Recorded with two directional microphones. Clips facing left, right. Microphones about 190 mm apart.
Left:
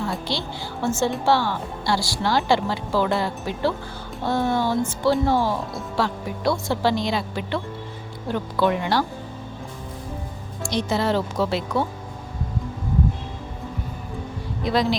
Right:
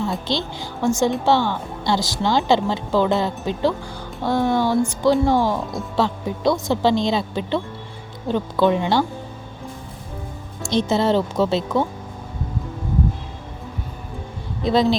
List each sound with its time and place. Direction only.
0.0 s a woman's voice: 20° right (ahead or behind)
10.6 s speech: 25° right (ahead or behind)
14.6 s speech: 25° right (ahead or behind)